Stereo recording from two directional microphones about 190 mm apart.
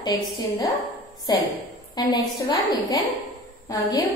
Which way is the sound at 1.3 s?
20° left (ahead or behind).